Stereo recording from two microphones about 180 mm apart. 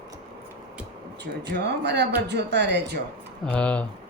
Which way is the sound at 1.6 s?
70° right (ahead or behind).